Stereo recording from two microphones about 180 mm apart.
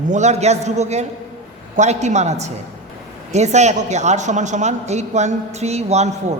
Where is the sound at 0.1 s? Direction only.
40° right (ahead or behind).